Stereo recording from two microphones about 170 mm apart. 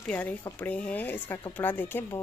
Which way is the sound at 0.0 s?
10° left (ahead or behind).